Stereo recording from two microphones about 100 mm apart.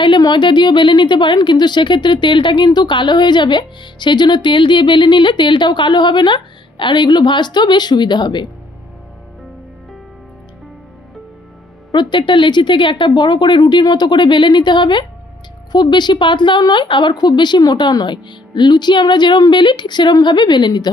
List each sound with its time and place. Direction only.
0.0 s a woman's voice: 50° left (ahead or behind)
11.9 s a woman's voice: 50° left (ahead or behind)